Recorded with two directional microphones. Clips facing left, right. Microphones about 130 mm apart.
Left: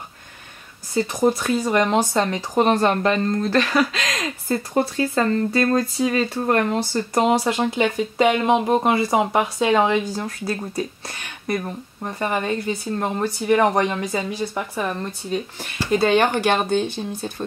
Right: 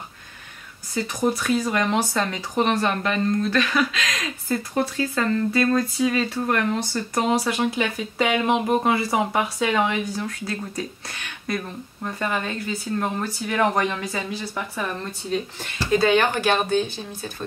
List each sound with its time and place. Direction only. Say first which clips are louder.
0.9 s speech: left 4 dB; 30° left (ahead or behind)
2.6 s a woman's voice: left 4 dB; 40° left (ahead or behind)
7.2 s a woman's voice: left 3 dB; 25° left (ahead or behind)